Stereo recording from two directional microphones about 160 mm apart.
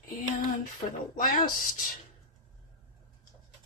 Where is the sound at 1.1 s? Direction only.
55° left (ahead or behind).